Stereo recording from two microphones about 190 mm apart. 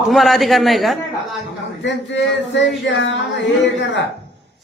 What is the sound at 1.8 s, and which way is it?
Speech, 70° left (ahead or behind).